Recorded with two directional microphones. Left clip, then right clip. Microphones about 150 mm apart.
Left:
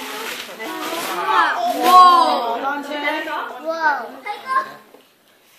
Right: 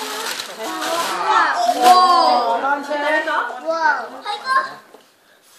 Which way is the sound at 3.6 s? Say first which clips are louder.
Even; 55° left (ahead or behind).